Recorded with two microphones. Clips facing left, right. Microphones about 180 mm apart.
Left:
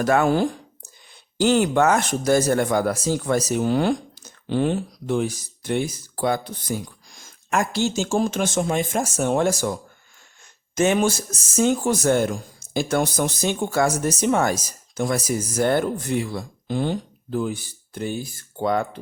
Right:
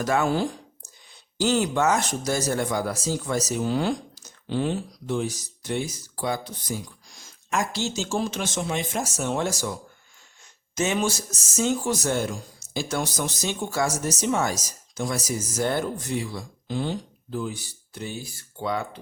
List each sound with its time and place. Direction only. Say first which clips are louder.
0.0 s speech: left 4 dB; 55° left (ahead or behind)
10.8 s speech: left 6 dB; 55° left (ahead or behind)